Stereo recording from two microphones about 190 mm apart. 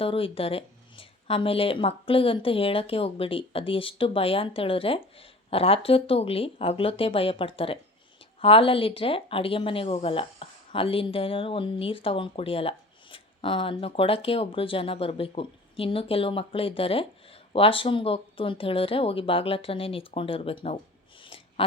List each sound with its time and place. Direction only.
0.0 s speech: 30° left (ahead or behind)